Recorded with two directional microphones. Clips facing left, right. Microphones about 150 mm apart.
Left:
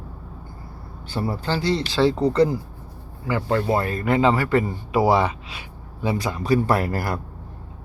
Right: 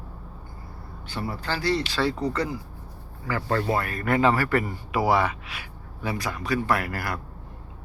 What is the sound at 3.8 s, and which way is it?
A man's voice, 25° left (ahead or behind).